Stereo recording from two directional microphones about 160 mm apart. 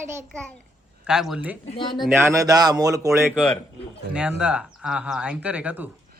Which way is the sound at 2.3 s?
20° right (ahead or behind).